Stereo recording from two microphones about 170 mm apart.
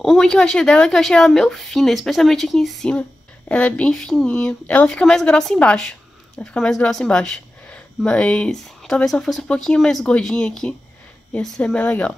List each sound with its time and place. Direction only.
0.0 s speech: centre (ahead or behind)